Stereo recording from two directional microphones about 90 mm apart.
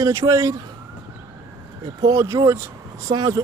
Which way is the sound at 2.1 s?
35° right (ahead or behind).